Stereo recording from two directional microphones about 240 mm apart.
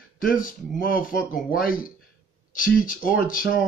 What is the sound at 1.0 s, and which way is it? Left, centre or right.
Speech, left.